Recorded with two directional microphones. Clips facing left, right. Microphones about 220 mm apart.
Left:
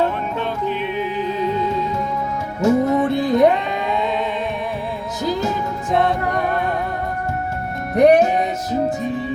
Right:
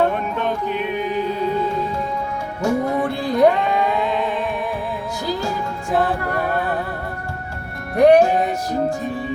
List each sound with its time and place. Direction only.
2.6 s music: 20° left (ahead or behind)
5.2 s music: 20° left (ahead or behind)
5.9 s music: 5° right (ahead or behind)
7.9 s music: 20° left (ahead or behind)